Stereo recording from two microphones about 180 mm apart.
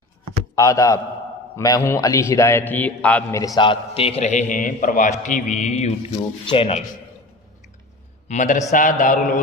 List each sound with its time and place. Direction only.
0.6 s a man's voice: 15° left (ahead or behind)
8.3 s a man's voice: 40° left (ahead or behind)